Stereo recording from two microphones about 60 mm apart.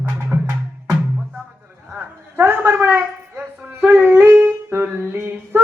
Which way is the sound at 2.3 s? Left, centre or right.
Right.